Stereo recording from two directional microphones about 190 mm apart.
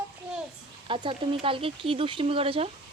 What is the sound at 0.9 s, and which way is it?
Speech, 25° right (ahead or behind).